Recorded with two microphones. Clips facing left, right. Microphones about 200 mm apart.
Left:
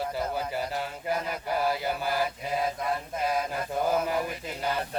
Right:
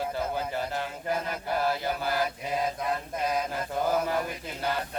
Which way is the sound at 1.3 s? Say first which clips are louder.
Left 1 dB; 10° left (ahead or behind).